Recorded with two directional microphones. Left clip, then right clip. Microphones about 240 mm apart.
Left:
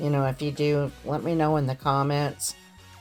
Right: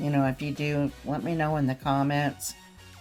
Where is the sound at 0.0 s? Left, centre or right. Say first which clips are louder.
Left 1 dB; left.